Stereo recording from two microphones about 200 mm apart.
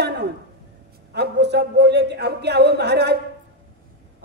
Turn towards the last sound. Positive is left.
turn(degrees=-55)  # may be behind; listen again after turning